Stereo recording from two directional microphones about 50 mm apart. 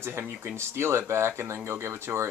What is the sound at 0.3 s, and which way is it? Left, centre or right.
Speech, right.